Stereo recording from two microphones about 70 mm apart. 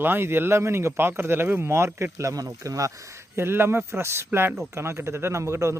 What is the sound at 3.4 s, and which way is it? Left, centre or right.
A man's voice, right.